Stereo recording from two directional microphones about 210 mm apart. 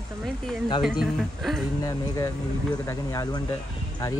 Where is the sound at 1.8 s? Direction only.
15° left (ahead or behind).